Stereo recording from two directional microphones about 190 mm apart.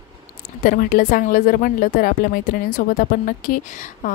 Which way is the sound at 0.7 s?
50° left (ahead or behind).